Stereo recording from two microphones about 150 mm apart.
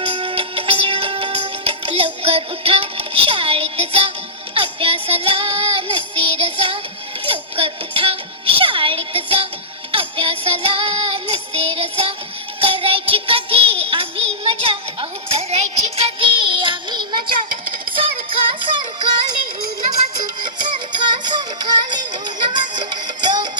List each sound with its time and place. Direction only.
0.0 s music: 35° right (ahead or behind)
15.3 s a sound: 45° right (ahead or behind)
16.0 s music: 35° right (ahead or behind)
20.4 s music: 30° right (ahead or behind)